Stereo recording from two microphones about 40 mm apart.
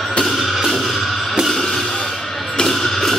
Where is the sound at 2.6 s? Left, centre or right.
Centre.